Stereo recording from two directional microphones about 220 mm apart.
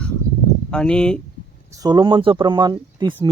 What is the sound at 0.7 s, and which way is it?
Speech, 5° left (ahead or behind).